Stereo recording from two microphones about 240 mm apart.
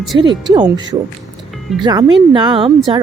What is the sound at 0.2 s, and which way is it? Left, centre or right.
A woman's voice, centre.